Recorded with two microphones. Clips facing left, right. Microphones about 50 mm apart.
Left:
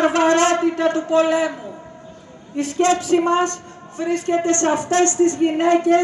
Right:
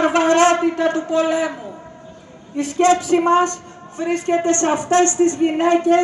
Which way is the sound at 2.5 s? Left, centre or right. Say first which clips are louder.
Right 2 dB; right.